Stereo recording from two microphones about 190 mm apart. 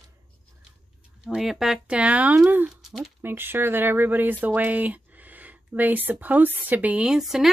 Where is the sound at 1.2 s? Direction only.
Centre (ahead or behind).